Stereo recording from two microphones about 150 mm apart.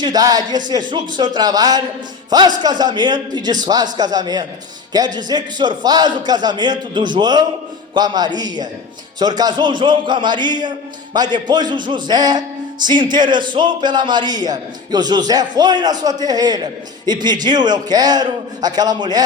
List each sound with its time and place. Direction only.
0.0 s speech: 25° right (ahead or behind)